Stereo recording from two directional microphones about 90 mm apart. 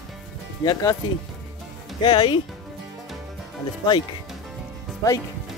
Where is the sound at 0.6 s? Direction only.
40° left (ahead or behind).